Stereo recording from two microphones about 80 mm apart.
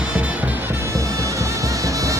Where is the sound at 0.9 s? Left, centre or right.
Right.